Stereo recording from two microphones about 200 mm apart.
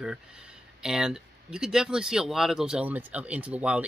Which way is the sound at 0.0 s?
5° right (ahead or behind).